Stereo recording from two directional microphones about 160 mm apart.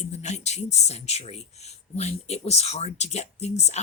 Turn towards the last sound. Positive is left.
turn(degrees=45)  # may be behind; listen again after turning